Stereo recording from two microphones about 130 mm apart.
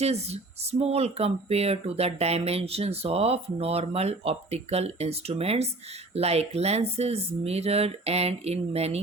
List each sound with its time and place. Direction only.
0.0 s speech: 55° right (ahead or behind)